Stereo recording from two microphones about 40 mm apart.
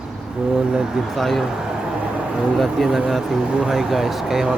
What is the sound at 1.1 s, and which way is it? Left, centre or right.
Speech, centre.